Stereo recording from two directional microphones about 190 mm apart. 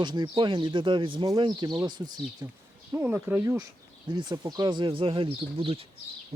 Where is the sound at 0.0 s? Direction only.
25° right (ahead or behind).